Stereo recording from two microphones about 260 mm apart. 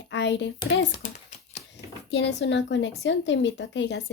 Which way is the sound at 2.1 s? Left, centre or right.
Left.